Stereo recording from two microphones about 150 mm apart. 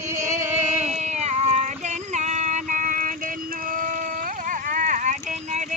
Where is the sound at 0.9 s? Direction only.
50° right (ahead or behind).